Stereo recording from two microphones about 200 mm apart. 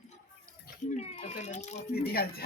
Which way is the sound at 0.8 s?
35° left (ahead or behind).